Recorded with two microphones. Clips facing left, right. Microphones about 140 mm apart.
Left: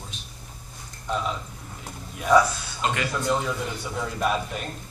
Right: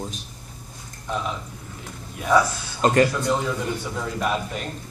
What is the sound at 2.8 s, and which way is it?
Speech, 40° right (ahead or behind).